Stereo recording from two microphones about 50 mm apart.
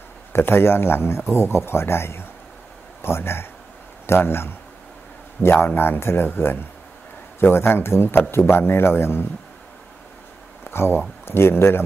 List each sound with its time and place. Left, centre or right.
0.3 s a man's voice: left
10.6 s a sound: left
11.2 s a man's voice: left